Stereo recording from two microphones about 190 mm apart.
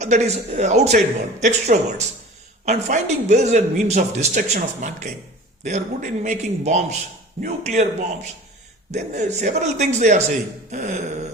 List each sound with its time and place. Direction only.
0.0 s speech: 35° right (ahead or behind)